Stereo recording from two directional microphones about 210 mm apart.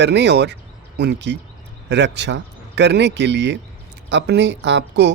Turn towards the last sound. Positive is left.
turn(degrees=-55)  # may be behind; listen again after turning